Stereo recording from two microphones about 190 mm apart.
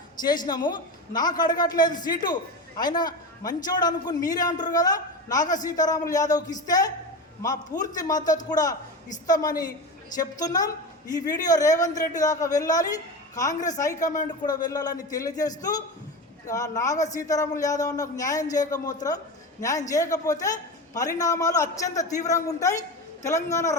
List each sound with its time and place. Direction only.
0.2 s a man's voice: 20° left (ahead or behind)
7.9 s a man's voice: 20° left (ahead or behind)
13.9 s speech: 40° left (ahead or behind)
14.4 s a man's voice: 20° left (ahead or behind)